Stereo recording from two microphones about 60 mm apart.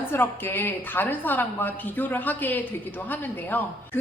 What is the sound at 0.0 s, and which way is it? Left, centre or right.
A woman's voice, left.